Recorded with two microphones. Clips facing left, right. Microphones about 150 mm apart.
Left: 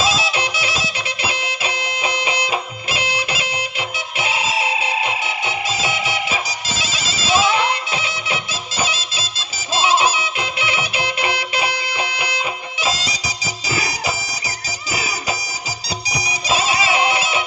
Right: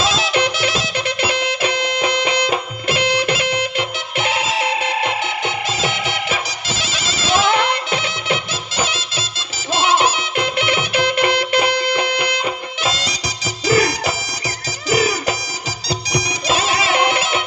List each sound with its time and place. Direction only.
0.0 s music: 60° right (ahead or behind)